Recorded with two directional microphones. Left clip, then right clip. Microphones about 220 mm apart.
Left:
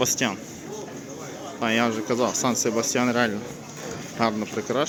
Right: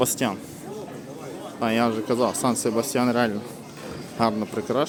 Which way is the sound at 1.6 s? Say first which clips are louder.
Even; 15° right (ahead or behind).